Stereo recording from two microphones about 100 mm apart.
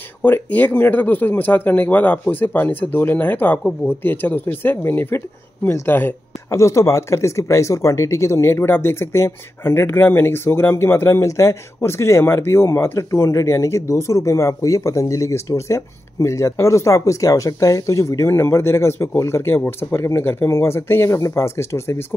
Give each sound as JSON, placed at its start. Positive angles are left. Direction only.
{"t": 0.2, "sound": "speech", "side_deg": 15}